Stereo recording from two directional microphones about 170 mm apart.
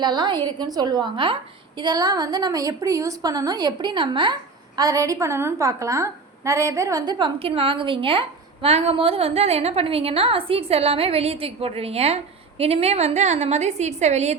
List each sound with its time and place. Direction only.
0.0 s a woman's voice: 25° right (ahead or behind); by 14.3 s 40° right (ahead or behind)